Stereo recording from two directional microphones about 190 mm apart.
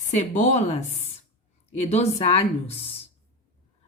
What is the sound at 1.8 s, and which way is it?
A woman's voice, 35° left (ahead or behind).